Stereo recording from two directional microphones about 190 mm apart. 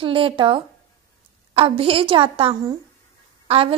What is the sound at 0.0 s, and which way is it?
A woman's voice, 30° right (ahead or behind).